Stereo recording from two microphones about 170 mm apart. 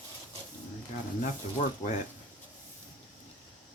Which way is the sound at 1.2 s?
45° left (ahead or behind).